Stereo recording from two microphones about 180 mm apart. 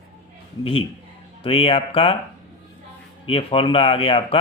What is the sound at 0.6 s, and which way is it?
Speech, 30° left (ahead or behind).